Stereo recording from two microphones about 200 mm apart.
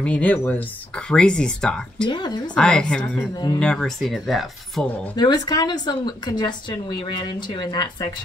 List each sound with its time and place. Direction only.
0.0 s speech: 5° left (ahead or behind)
2.0 s speech: 20° left (ahead or behind)
2.5 s speech: 5° left (ahead or behind)
5.1 s speech: 20° left (ahead or behind)